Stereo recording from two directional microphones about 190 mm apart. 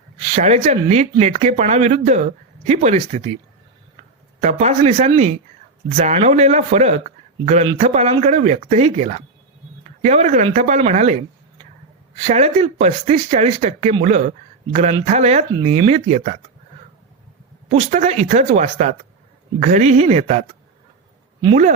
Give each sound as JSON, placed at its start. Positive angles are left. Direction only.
{"t": 0.2, "sound": "speech", "side_deg": -35}
{"t": 4.4, "sound": "speech", "side_deg": -35}
{"t": 17.7, "sound": "speech", "side_deg": -35}